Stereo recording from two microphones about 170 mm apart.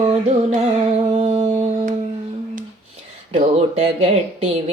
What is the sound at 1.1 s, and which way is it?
Music, 30° right (ahead or behind).